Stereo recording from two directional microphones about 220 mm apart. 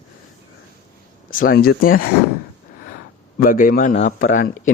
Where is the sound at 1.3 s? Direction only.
40° left (ahead or behind).